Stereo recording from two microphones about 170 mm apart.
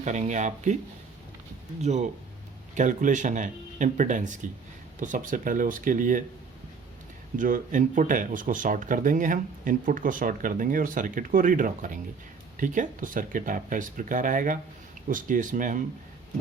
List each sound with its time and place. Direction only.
0.0 s speech: 45° right (ahead or behind)
1.8 s speech: 40° right (ahead or behind)
7.3 s speech: 50° right (ahead or behind)